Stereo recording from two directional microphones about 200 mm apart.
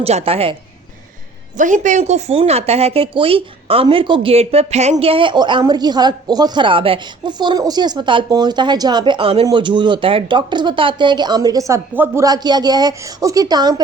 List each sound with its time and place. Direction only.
0.0 s speech: 30° right (ahead or behind)
1.5 s speech: 40° right (ahead or behind); by 13.8 s 20° right (ahead or behind)